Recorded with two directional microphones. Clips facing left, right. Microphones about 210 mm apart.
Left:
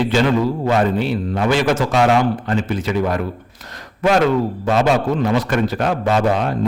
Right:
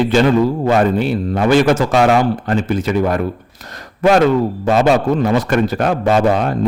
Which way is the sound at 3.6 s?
45° right (ahead or behind).